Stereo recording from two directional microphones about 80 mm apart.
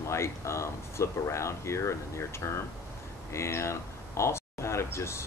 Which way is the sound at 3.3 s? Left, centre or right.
Left.